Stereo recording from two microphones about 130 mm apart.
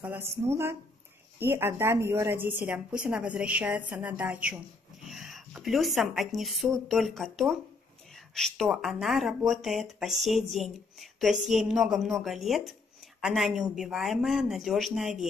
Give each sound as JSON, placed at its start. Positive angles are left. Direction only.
{"t": 0.0, "sound": "a woman's voice", "side_deg": -15}